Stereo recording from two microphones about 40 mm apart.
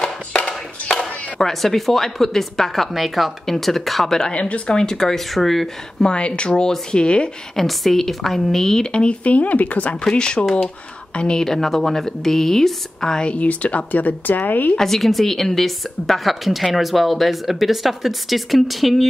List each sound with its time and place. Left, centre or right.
0.3 s a sound: left
0.8 s a woman's voice: centre
4.3 s speech: left
4.7 s speech: centre
6.0 s speech: left
7.5 s speech: centre
8.9 s speech: left
10.0 s speech: left
11.3 s speech: centre
13.2 s speech: left
14.8 s a woman's voice: centre